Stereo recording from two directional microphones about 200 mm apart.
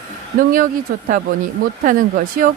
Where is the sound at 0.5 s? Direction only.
45° right (ahead or behind).